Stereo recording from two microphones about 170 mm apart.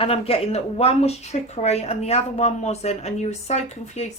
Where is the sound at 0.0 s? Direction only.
35° left (ahead or behind).